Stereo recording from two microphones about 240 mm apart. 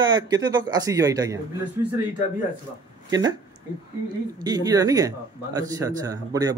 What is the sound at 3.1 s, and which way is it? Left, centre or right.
Speech, centre.